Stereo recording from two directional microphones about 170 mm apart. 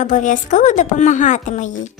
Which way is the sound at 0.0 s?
45° left (ahead or behind).